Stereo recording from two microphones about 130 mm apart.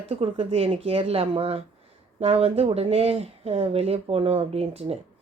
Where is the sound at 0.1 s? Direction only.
50° right (ahead or behind).